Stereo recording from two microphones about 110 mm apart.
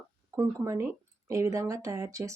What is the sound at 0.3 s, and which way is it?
Speech, 25° right (ahead or behind).